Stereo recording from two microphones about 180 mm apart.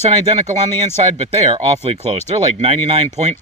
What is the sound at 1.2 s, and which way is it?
Speech, 35° right (ahead or behind).